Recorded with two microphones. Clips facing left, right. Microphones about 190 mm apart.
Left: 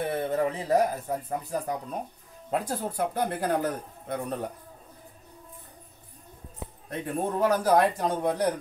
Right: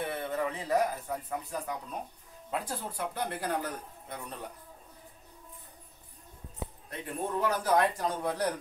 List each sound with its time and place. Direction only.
0.0 s speech: 40° left (ahead or behind)
6.9 s speech: 45° left (ahead or behind)
8.0 s speech: 20° left (ahead or behind)